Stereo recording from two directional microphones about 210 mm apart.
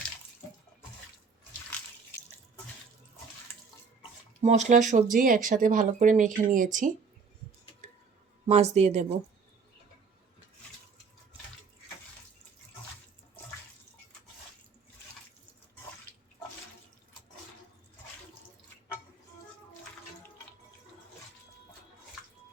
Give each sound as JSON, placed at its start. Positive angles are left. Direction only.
{"t": 4.4, "sound": "speech", "side_deg": -30}
{"t": 7.8, "sound": "clicking", "side_deg": -30}
{"t": 8.4, "sound": "speech", "side_deg": -30}